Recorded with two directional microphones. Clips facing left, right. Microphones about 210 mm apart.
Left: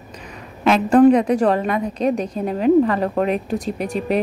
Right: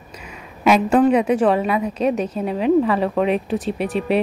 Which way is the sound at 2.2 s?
5° right (ahead or behind).